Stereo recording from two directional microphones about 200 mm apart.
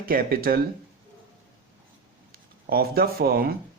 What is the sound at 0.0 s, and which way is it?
Speech, 45° right (ahead or behind).